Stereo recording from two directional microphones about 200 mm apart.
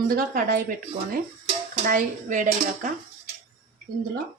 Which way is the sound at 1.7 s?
40° right (ahead or behind).